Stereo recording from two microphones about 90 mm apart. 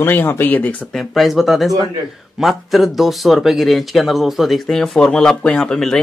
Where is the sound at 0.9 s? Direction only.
Centre (ahead or behind).